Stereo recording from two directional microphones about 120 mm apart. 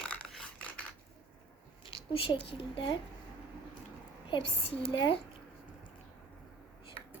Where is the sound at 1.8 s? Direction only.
45° left (ahead or behind).